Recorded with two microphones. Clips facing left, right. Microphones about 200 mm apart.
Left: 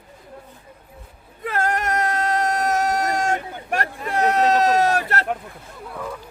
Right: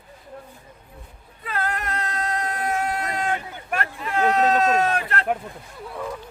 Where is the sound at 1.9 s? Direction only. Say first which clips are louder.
Left 6 dB; 45° left (ahead or behind).